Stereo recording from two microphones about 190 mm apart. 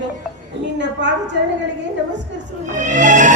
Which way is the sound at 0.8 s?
70° right (ahead or behind).